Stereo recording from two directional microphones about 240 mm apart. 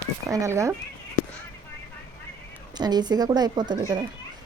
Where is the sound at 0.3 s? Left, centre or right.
Centre.